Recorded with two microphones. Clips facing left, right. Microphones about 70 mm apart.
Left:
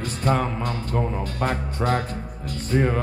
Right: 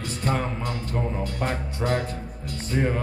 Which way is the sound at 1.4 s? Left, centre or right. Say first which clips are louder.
Left 5 dB; left.